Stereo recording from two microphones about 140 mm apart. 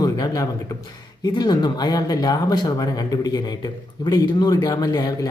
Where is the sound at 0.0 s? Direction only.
25° left (ahead or behind).